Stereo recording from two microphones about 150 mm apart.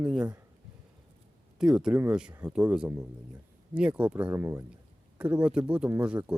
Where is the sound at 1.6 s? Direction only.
5° right (ahead or behind).